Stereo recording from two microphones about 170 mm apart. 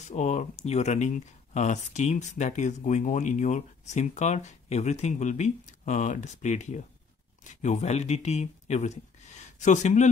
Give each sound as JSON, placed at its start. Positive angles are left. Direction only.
{"t": 0.0, "sound": "speech", "side_deg": 45}